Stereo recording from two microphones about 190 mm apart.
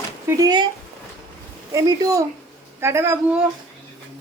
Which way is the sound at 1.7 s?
20° right (ahead or behind).